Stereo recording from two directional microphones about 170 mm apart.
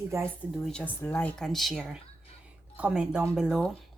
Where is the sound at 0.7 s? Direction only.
10° left (ahead or behind).